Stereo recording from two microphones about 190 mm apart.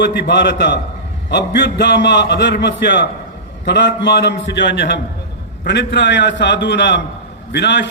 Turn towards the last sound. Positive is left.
turn(degrees=65)  # may be behind; listen again after turning